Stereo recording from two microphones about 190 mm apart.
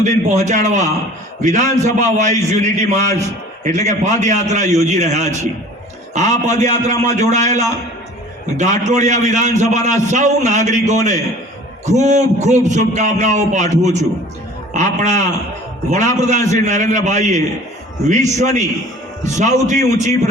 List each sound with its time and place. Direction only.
0.0 s a man's voice: 40° right (ahead or behind)